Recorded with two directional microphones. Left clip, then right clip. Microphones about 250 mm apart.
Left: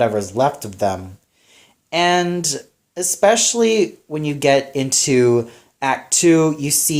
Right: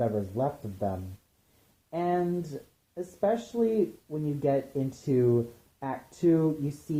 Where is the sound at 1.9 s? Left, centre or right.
Left.